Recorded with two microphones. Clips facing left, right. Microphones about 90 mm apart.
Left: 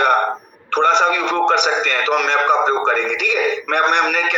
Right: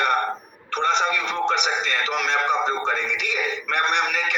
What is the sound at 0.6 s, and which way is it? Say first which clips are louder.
A man's voice: left 7 dB; 65° left (ahead or behind).